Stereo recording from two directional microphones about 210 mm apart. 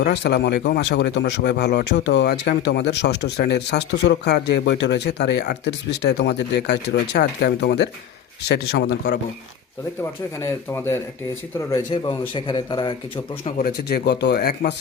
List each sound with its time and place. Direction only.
0.0 s speech: 55° left (ahead or behind)
10.0 s a man's voice: 10° left (ahead or behind)
13.4 s speech: 40° left (ahead or behind)